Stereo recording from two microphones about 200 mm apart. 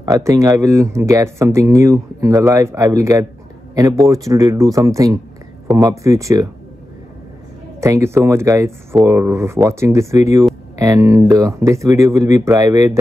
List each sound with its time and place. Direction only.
0.0 s speech: 15° right (ahead or behind)
7.8 s speech: 15° right (ahead or behind)